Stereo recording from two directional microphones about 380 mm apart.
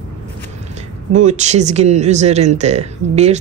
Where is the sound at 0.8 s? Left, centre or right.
Centre.